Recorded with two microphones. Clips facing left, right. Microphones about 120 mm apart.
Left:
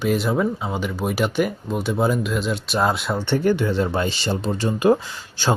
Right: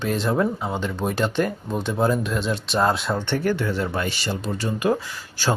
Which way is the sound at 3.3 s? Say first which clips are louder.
Left 6 dB; 20° left (ahead or behind).